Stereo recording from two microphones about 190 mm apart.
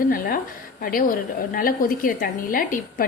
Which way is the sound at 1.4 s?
50° left (ahead or behind).